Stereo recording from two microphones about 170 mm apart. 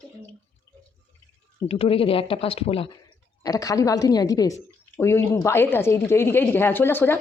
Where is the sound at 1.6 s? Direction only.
35° left (ahead or behind).